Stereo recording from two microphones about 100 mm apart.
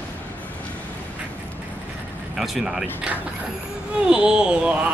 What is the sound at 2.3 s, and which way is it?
Speech, centre (ahead or behind).